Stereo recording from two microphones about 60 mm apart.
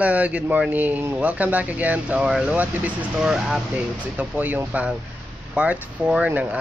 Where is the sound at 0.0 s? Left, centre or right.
Right.